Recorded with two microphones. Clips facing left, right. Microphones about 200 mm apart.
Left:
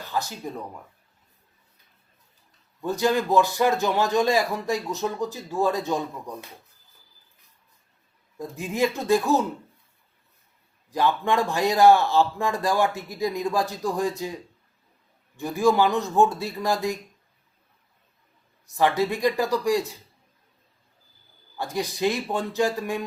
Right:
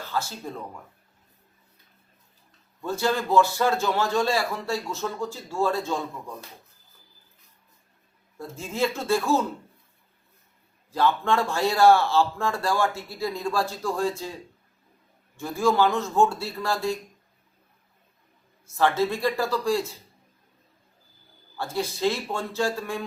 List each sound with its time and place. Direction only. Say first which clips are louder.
0.0 s speech: left 1 dB; 15° left (ahead or behind)
2.8 s speech: left 3 dB; 15° left (ahead or behind)
8.4 s speech: left 2 dB; 15° left (ahead or behind)
10.9 s speech: even; 15° left (ahead or behind)
15.4 s speech: left 2 dB; 15° left (ahead or behind)
18.8 s speech: left 1 dB; 15° left (ahead or behind)
21.6 s speech: left 1 dB; 15° left (ahead or behind)